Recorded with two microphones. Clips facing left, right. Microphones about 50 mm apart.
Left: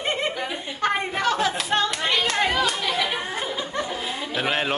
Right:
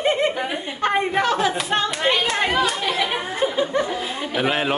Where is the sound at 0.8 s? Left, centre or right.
Centre.